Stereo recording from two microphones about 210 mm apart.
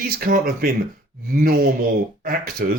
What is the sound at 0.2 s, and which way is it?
Speech, 40° right (ahead or behind).